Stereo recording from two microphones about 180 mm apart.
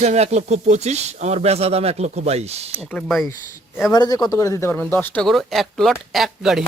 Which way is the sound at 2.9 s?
5° left (ahead or behind).